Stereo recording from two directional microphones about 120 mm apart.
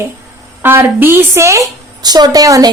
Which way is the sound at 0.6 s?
20° right (ahead or behind).